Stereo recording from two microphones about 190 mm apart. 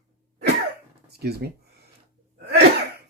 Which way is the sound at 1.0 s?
55° right (ahead or behind).